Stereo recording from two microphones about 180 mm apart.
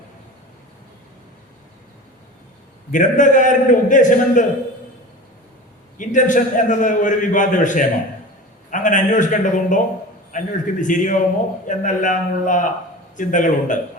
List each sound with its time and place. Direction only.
2.9 s a man's voice: 45° left (ahead or behind)
6.0 s a man's voice: 45° left (ahead or behind)